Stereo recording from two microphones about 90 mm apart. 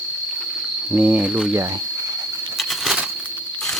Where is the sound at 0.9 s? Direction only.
15° right (ahead or behind).